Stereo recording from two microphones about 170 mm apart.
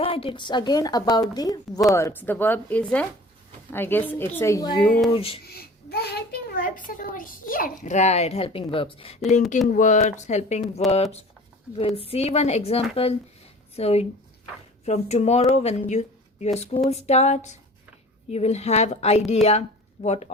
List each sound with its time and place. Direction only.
0.0 s a woman's voice: 30° left (ahead or behind)
5.5 s a child's voice: 65° left (ahead or behind); by 9.1 s 30° left (ahead or behind)
9.6 s speech: 45° left (ahead or behind)